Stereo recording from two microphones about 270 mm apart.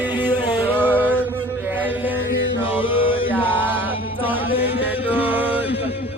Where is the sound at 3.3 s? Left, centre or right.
Centre.